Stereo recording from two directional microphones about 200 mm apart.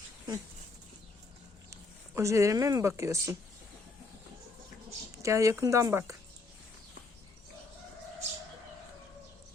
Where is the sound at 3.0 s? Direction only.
15° right (ahead or behind).